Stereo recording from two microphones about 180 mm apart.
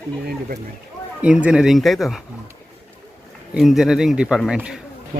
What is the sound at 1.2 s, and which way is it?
Speech, 5° right (ahead or behind).